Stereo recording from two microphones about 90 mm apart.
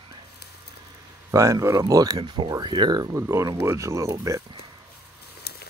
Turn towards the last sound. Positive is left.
turn(degrees=-35)  # may be behind; listen again after turning